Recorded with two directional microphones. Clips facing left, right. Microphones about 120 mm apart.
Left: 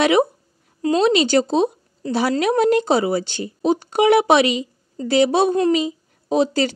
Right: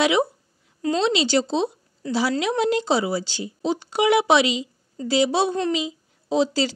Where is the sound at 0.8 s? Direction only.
45° left (ahead or behind).